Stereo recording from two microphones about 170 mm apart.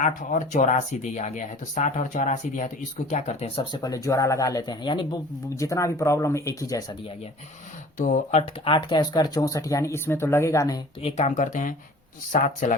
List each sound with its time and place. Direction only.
0.0 s speech: 50° left (ahead or behind); by 6.8 s 20° left (ahead or behind)
7.9 s speech: 45° left (ahead or behind); by 10.8 s 15° left (ahead or behind)
11.0 s speech: 45° left (ahead or behind)